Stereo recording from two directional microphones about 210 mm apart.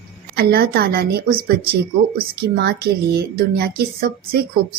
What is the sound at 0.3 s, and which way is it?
Speech, 45° right (ahead or behind).